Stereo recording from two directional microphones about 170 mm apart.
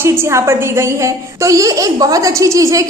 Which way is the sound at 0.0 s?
15° right (ahead or behind).